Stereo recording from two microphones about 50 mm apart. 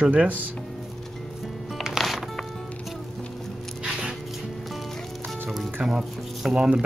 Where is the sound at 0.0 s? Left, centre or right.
Right.